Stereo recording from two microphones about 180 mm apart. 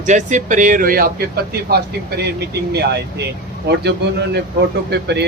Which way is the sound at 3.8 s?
70° right (ahead or behind).